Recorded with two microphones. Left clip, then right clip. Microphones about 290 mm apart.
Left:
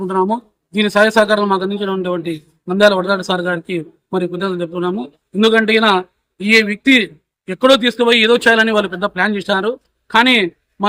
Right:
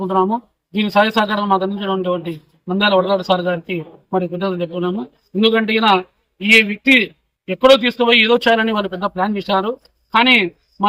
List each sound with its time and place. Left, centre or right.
0.1 s a man's voice: centre